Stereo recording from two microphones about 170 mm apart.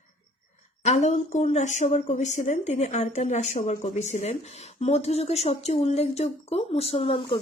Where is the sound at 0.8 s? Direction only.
40° left (ahead or behind).